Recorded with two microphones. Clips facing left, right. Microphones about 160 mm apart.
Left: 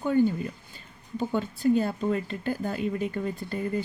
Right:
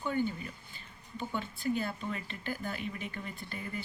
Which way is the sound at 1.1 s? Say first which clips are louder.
Left 9 dB; 40° left (ahead or behind).